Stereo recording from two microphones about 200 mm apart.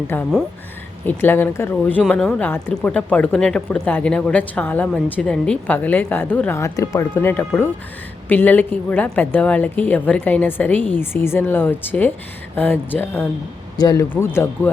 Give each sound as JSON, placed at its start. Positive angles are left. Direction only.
{"t": 0.1, "sound": "a man's voice", "side_deg": 5}